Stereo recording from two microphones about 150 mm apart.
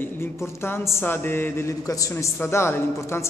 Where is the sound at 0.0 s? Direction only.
15° left (ahead or behind).